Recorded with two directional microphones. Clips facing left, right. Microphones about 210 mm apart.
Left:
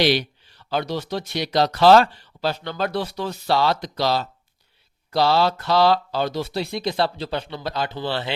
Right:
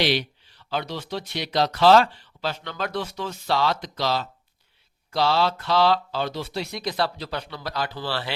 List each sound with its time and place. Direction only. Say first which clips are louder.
0.0 s speech: left 4 dB; 40° left (ahead or behind); by 8.3 s 20° left (ahead or behind)